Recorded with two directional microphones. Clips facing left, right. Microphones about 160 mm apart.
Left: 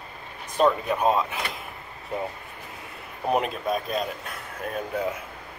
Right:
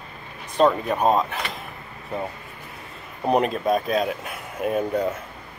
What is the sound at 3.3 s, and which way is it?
Speech, centre (ahead or behind).